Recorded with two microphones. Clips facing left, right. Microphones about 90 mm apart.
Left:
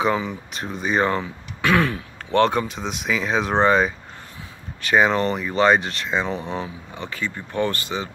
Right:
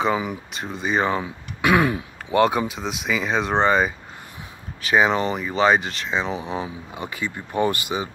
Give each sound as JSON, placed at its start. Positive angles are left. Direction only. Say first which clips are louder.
{"t": 0.0, "sound": "speech", "louder": "even", "side_deg": -10}